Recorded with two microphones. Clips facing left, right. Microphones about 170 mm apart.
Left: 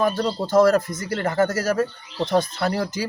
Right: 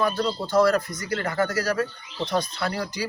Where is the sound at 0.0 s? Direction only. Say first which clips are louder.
Left 3 dB; 40° left (ahead or behind).